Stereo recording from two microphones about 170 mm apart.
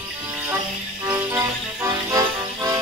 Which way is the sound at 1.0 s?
15° right (ahead or behind).